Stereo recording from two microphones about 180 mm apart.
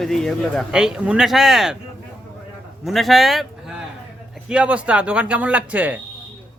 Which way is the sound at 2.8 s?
Centre (ahead or behind).